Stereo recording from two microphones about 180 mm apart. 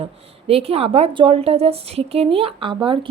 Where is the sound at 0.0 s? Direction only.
35° right (ahead or behind).